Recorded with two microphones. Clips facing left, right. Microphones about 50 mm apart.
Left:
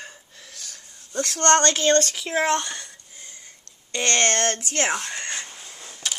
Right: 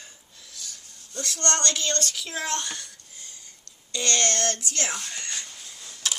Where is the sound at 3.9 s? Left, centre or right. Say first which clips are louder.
Left 4 dB; left.